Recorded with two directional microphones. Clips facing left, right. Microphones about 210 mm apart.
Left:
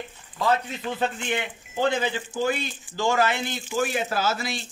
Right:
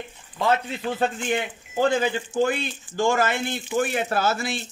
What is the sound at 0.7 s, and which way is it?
Speech, 35° right (ahead or behind).